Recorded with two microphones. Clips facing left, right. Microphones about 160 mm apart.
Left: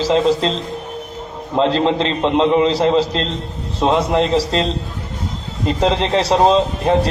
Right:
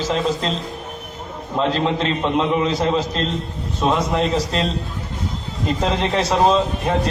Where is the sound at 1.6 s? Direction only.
30° left (ahead or behind).